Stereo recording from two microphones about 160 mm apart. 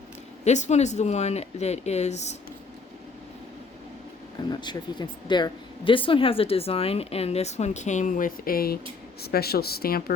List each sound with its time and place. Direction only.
0.4 s speech: 45° left (ahead or behind)
4.4 s speech: 25° left (ahead or behind); by 10.2 s 70° left (ahead or behind)